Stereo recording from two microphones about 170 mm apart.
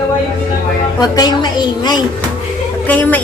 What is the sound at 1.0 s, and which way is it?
A woman's voice, 25° left (ahead or behind).